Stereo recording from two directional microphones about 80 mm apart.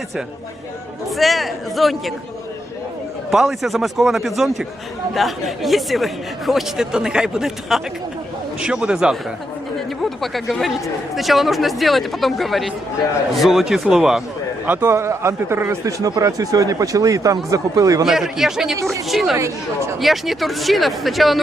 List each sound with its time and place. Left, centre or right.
1.1 s speech: centre
3.3 s a man's voice: centre
9.7 s speech: centre
14.7 s a man's voice: right
16.0 s speech: right
18.0 s speech: centre